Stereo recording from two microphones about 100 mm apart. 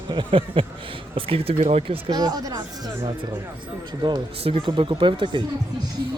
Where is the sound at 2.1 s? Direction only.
40° right (ahead or behind).